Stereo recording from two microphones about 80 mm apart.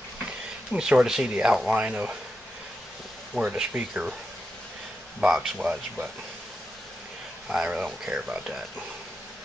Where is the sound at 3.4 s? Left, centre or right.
Centre.